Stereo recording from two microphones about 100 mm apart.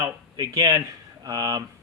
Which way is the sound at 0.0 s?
35° right (ahead or behind).